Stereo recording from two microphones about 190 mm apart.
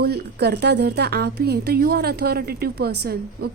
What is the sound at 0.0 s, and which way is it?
A woman's voice, 60° right (ahead or behind).